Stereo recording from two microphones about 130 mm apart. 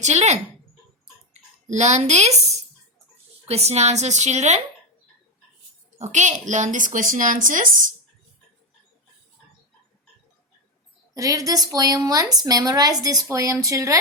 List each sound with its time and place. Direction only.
0.0 s a woman's voice: 60° right (ahead or behind)
6.0 s a woman's voice: 65° right (ahead or behind); by 7.9 s 90° right
11.1 s a woman's voice: 30° right (ahead or behind)